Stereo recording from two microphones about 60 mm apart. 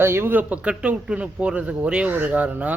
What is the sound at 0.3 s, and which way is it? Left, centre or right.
Speech, right.